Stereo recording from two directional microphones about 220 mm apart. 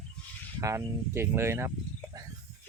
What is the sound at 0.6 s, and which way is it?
Speech, 15° right (ahead or behind).